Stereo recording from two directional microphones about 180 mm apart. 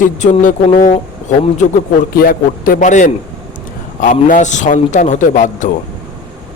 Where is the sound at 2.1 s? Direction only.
50° left (ahead or behind).